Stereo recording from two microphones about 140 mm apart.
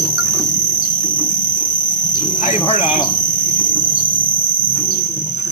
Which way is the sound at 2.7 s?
40° left (ahead or behind).